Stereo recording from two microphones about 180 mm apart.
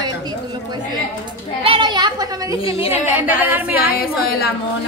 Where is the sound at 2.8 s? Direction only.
10° right (ahead or behind).